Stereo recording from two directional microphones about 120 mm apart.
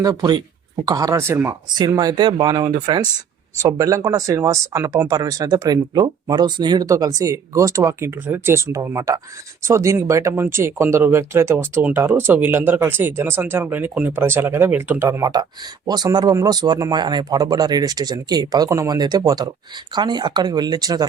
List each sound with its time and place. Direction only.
0.0 s speech: 30° right (ahead or behind)
3.6 s speech: 25° right (ahead or behind)
15.9 s speech: 35° right (ahead or behind)